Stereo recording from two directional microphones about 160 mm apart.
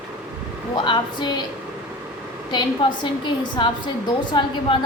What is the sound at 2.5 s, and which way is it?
A woman's voice, 30° left (ahead or behind).